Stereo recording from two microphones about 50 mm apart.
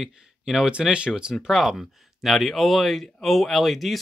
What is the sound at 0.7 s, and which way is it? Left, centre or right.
Speech, centre.